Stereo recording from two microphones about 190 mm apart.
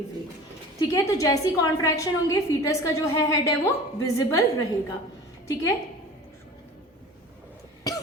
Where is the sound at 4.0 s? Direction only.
15° left (ahead or behind).